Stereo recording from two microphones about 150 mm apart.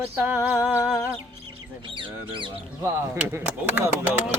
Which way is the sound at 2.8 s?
15° right (ahead or behind).